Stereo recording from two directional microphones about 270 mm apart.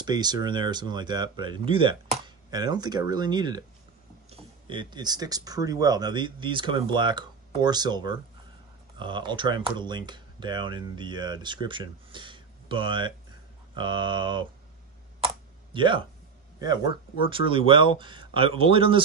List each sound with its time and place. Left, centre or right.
0.0 s speech: centre
15.7 s a man's voice: centre